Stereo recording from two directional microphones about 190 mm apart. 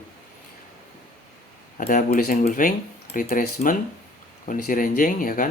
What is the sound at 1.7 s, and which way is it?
Speech, 45° left (ahead or behind).